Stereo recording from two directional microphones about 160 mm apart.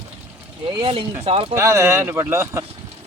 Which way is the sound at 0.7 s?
30° right (ahead or behind).